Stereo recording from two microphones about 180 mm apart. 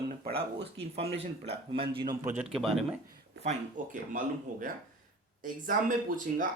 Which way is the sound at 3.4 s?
45° right (ahead or behind).